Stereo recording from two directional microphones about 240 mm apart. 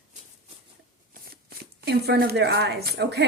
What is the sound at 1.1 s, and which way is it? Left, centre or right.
Speech, right.